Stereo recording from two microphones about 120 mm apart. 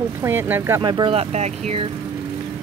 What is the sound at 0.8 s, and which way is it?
Speech, 40° right (ahead or behind).